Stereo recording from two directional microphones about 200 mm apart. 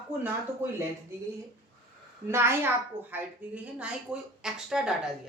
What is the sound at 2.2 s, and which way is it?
A child's voice, 15° right (ahead or behind).